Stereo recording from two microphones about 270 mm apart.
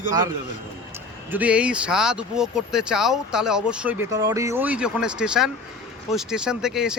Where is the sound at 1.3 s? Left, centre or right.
Centre.